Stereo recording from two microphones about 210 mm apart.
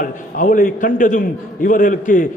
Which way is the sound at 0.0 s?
40° left (ahead or behind).